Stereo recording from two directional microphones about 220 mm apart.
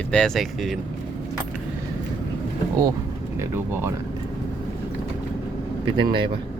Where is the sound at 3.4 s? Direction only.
10° right (ahead or behind).